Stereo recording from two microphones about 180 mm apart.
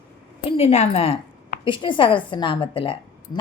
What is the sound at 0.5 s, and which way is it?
A woman's voice, 35° left (ahead or behind).